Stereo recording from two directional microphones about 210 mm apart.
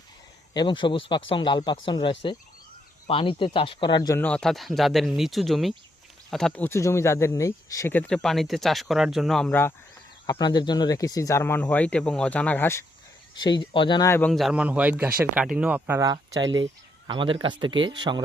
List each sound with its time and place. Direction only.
0.5 s speech: 20° left (ahead or behind)
4.2 s speech: 5° left (ahead or behind)
10.2 s speech: 20° left (ahead or behind)
13.3 s speech: 20° left (ahead or behind); by 16.1 s 10° right (ahead or behind)
17.1 s speech: 25° right (ahead or behind)